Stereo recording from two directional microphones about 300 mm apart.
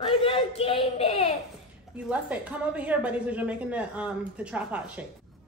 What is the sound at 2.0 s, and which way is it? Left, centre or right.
A woman's voice, centre.